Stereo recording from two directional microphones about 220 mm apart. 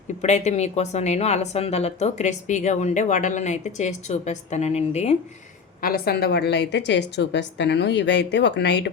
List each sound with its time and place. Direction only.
0.2 s speech: 30° left (ahead or behind)
5.8 s a woman's voice: 45° left (ahead or behind)